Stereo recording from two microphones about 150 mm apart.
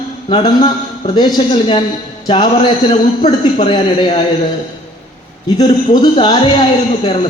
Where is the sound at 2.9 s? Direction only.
40° left (ahead or behind).